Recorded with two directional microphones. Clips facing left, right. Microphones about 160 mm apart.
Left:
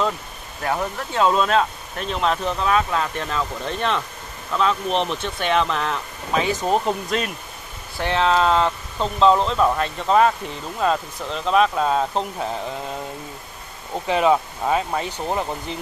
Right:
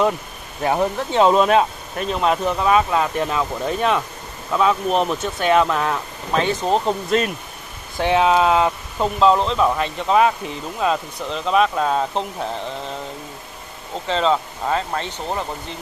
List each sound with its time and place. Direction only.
0.6 s speech: 25° right (ahead or behind)
2.0 s speech: 5° right (ahead or behind)
6.3 s speech: 5° left (ahead or behind)
8.0 s speech: 15° right (ahead or behind); by 12.9 s 5° left (ahead or behind)
13.9 s speech: 15° left (ahead or behind)